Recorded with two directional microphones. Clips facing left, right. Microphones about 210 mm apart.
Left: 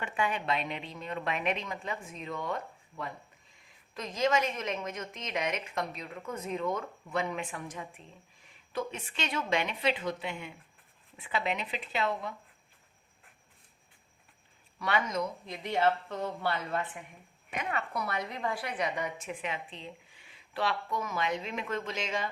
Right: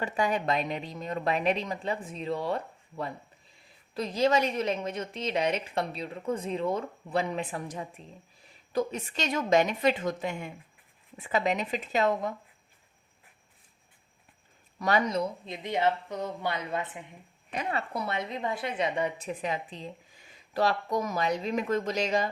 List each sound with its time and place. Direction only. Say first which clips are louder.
0.0 s a woman's voice: right 4 dB; 40° right (ahead or behind)
14.8 s speech: right 4 dB; 40° right (ahead or behind); by 17.0 s 20° right (ahead or behind)
17.5 s a woman's voice: right 3 dB; 35° right (ahead or behind)